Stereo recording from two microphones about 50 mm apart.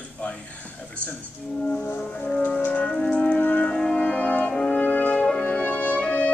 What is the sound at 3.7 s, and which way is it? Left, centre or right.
French horn, centre.